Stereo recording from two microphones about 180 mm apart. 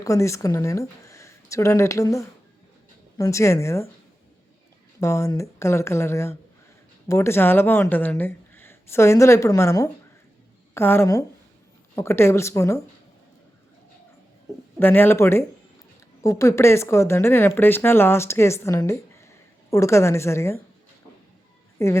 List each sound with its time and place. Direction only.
0.0 s speech: 15° left (ahead or behind)
4.9 s speech: 15° left (ahead or behind)
14.8 s speech: 10° left (ahead or behind)
21.8 s speech: 15° left (ahead or behind)